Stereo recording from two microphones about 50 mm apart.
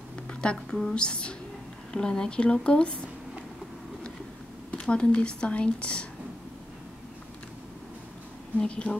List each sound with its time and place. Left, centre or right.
0.3 s a woman's voice: centre
4.7 s speech: centre
8.5 s speech: left